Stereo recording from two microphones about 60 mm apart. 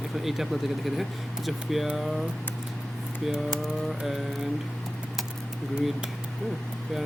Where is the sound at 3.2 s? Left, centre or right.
Centre.